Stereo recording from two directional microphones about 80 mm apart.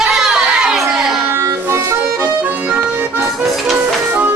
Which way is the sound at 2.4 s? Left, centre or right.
Centre.